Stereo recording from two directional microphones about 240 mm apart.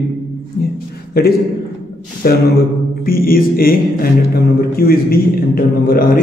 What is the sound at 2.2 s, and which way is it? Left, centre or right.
A man's voice, left.